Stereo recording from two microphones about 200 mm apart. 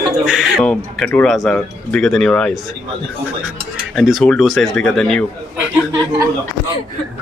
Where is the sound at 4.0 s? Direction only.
Centre (ahead or behind).